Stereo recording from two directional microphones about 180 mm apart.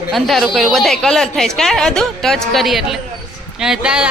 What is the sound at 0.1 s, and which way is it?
A woman's voice, centre (ahead or behind).